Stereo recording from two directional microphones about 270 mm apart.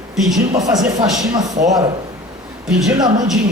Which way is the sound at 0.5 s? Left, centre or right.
Centre.